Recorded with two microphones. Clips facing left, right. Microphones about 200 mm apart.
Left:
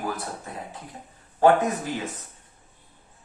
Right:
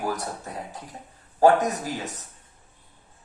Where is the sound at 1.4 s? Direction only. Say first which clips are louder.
Even; 40° right (ahead or behind).